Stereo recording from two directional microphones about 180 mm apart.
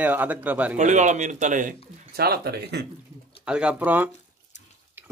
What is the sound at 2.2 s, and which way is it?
Speech, 60° right (ahead or behind).